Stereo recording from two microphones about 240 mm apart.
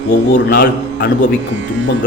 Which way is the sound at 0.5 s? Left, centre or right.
Left.